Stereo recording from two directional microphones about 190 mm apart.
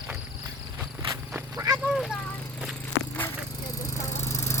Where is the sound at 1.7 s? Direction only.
5° right (ahead or behind).